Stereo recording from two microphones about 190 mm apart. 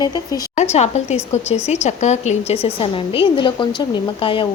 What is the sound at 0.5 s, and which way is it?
A woman's voice, 35° left (ahead or behind).